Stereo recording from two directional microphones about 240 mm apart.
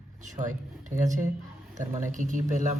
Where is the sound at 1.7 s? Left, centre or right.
Right.